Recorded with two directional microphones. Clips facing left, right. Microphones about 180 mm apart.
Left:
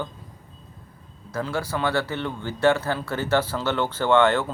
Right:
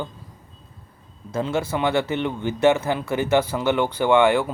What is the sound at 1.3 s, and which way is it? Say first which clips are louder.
Speech: right 4 dB; 25° right (ahead or behind).